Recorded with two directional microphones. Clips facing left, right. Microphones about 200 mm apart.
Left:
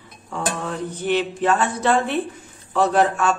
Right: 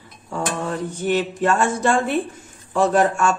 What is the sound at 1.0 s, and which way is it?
Speech, 45° right (ahead or behind).